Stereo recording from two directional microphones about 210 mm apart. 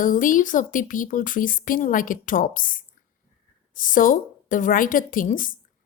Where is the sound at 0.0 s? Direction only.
40° left (ahead or behind).